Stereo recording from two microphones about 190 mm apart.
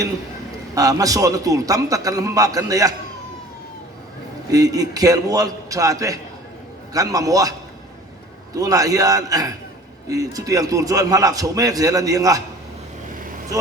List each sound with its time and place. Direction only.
0.8 s a man's voice: 20° right (ahead or behind)
4.5 s a man's voice: 20° right (ahead or behind)
8.5 s a man's voice: 20° right (ahead or behind)